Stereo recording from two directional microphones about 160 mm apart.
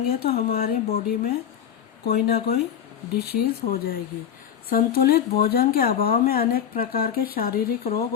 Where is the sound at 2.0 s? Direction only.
80° left.